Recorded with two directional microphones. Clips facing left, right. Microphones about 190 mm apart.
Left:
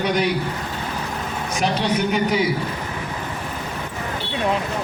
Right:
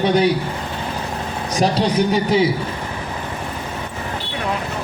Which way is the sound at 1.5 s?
35° right (ahead or behind).